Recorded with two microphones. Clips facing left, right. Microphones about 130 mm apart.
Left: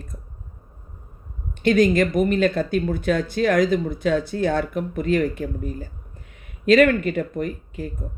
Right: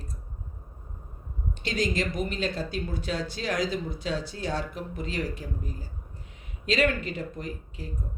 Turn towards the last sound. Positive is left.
turn(degrees=55)  # may be behind; listen again after turning